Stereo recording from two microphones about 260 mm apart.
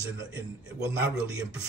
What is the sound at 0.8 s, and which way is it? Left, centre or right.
Speech, centre.